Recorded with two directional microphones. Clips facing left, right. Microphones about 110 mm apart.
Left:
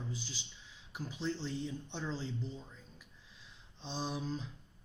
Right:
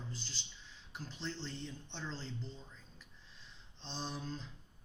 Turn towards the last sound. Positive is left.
turn(degrees=5)  # may be behind; listen again after turning